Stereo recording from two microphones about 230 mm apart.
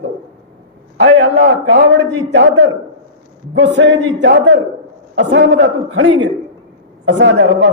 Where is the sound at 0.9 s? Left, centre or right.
Right.